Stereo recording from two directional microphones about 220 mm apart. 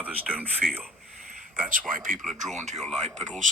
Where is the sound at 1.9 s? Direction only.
40° right (ahead or behind).